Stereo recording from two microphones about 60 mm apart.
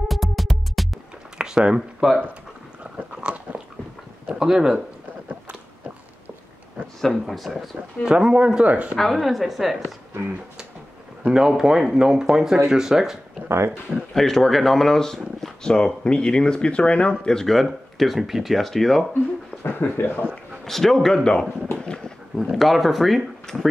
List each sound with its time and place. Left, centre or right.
0.1 s music: centre
1.4 s a sound: centre
2.8 s biting: centre
4.3 s speech: centre
5.3 s walk: centre
7.0 s a woman's voice: centre
8.0 s speech: centre
8.9 s a woman's voice: centre
11.2 s speech: centre
14.1 s speech: centre
19.6 s speech: left
20.6 s a woman's voice: centre
21.7 s a sound: centre
22.4 s speech: centre